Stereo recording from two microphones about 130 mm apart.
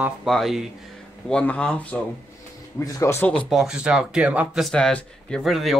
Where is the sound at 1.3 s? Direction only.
10° left (ahead or behind).